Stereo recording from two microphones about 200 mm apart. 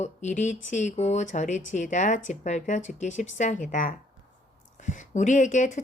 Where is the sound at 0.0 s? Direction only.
35° left (ahead or behind).